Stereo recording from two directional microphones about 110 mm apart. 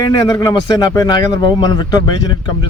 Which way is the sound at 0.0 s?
35° left (ahead or behind).